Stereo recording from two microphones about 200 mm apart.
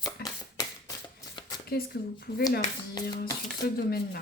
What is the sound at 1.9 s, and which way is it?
Speech, 55° left (ahead or behind).